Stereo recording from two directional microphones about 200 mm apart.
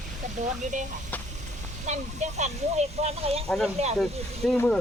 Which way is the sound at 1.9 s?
35° right (ahead or behind).